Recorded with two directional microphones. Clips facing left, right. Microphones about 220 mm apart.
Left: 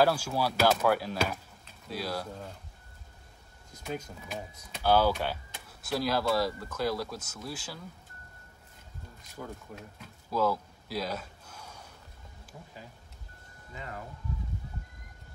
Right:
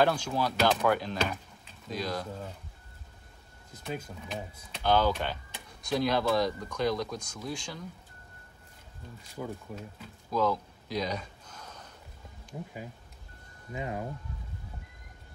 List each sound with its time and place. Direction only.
0.0 s speech: 5° left (ahead or behind)
3.7 s speech: 5° right (ahead or behind)
4.3 s speech: 10° left (ahead or behind)
9.4 s speech: 10° right (ahead or behind)
10.3 s a sound: 10° left (ahead or behind)
12.5 s speech: 20° right (ahead or behind)
13.7 s speech: 15° right (ahead or behind)